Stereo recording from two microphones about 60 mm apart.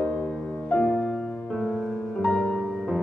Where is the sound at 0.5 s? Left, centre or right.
Centre.